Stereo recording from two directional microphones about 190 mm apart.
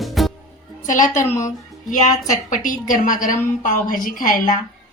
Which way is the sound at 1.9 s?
40° left (ahead or behind).